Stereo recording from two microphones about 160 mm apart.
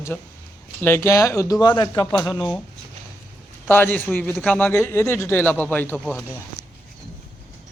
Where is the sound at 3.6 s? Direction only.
15° left (ahead or behind).